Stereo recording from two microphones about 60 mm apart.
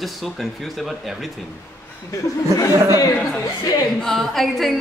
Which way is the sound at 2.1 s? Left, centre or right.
Left.